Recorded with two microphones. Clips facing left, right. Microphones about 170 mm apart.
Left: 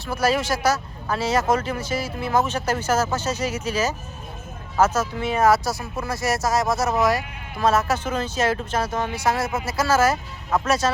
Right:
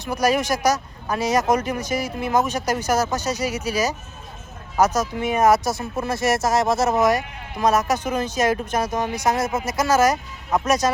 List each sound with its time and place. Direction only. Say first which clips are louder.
0.0 s speech: right 2 dB; 15° right (ahead or behind)